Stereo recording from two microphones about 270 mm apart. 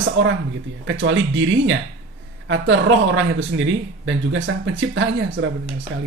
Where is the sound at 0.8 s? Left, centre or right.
Right.